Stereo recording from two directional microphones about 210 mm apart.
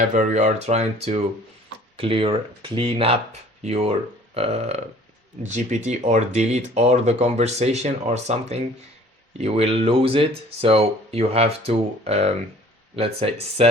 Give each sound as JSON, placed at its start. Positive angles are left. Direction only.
{"t": 0.1, "sound": "speech", "side_deg": -35}